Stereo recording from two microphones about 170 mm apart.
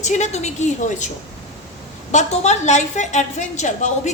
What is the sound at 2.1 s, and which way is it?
A woman's voice, 40° left (ahead or behind).